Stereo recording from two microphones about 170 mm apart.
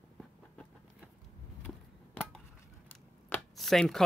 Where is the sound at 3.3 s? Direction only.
Centre (ahead or behind).